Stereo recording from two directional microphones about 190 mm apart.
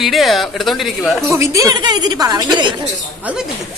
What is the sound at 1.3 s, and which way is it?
A woman's voice, 15° right (ahead or behind).